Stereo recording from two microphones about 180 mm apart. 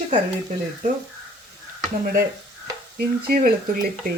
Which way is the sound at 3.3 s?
55° right (ahead or behind).